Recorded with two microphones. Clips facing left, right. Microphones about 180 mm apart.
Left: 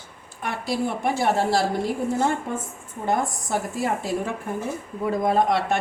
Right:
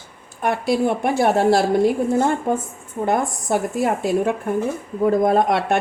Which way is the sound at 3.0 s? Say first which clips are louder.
Right 4 dB; 55° right (ahead or behind).